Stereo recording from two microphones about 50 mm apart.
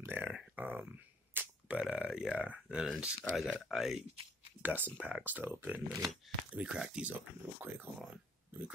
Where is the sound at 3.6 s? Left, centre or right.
Centre.